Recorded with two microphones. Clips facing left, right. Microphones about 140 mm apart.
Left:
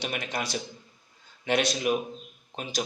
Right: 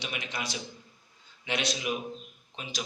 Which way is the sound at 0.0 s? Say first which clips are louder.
Left 5 dB; 45° left (ahead or behind).